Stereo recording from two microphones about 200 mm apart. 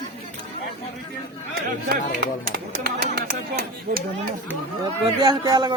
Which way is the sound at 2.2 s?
50° right (ahead or behind).